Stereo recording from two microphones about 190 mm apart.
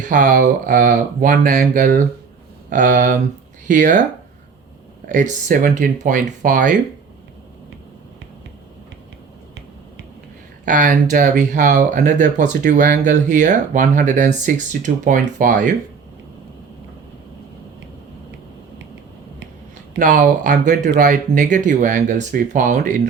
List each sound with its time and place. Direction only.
0.1 s speech: 40° right (ahead or behind)
5.0 s speech: 45° right (ahead or behind)
10.7 s speech: 45° right (ahead or behind)
20.0 s speech: 45° right (ahead or behind)